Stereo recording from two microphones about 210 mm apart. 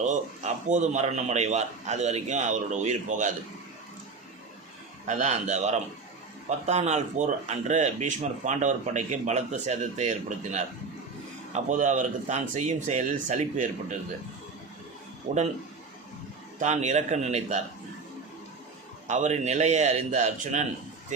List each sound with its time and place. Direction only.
0.0 s speech: 35° right (ahead or behind)
5.0 s speech: 35° right (ahead or behind)
16.6 s speech: 35° right (ahead or behind)
19.0 s speech: 35° right (ahead or behind)